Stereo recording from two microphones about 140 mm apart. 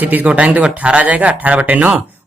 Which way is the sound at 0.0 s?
10° right (ahead or behind).